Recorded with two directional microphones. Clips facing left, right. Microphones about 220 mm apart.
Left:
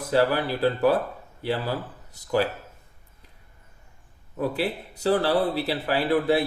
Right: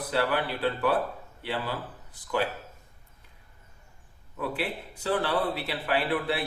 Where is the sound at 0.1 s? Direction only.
40° left (ahead or behind).